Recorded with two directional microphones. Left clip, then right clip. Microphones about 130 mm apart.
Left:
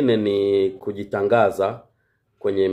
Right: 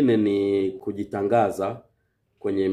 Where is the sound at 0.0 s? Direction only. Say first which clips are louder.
Left 2 dB; 20° right (ahead or behind).